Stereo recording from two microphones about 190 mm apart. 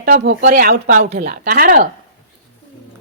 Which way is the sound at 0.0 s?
50° right (ahead or behind).